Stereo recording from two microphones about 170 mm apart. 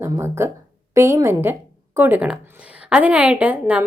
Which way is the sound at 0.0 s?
15° right (ahead or behind).